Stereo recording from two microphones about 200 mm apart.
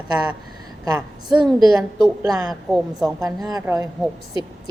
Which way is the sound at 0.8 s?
20° right (ahead or behind).